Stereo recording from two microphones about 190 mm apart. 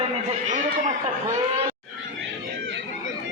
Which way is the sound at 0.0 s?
35° right (ahead or behind).